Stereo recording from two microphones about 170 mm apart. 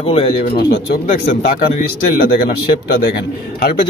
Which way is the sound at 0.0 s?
35° left (ahead or behind).